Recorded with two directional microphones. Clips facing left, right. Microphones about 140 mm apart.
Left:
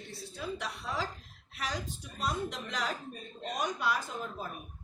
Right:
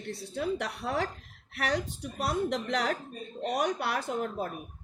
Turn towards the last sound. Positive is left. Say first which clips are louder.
# right 6 dB
turn(degrees=-70)  # may be behind; listen again after turning